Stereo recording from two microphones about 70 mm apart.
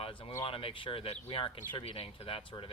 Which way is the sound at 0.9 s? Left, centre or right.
Left.